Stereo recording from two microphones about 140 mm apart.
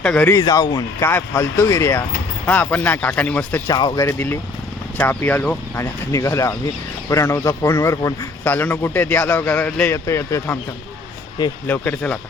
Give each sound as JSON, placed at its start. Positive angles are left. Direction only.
{"t": 0.0, "sound": "speech", "side_deg": 10}
{"t": 0.3, "sound": "speech", "side_deg": 25}
{"t": 1.0, "sound": "speech", "side_deg": 15}
{"t": 3.7, "sound": "speech", "side_deg": 30}
{"t": 4.0, "sound": "speech", "side_deg": 15}
{"t": 11.6, "sound": "speech", "side_deg": 10}